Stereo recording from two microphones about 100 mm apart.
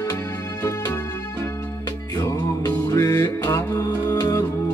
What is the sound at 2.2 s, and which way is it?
Music, 30° left (ahead or behind).